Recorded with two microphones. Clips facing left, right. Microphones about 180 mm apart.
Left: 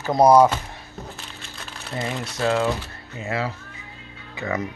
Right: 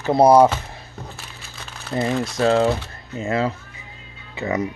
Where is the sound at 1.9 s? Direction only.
35° right (ahead or behind).